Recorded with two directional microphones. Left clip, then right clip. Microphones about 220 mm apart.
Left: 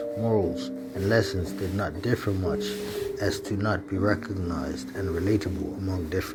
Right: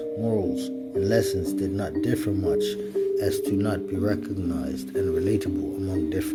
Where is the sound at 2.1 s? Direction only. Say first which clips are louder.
Right 3 dB; 15° right (ahead or behind).